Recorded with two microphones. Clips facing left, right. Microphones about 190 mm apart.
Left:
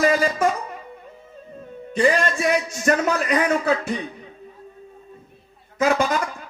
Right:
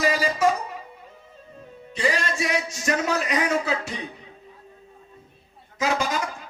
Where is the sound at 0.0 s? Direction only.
50° left (ahead or behind).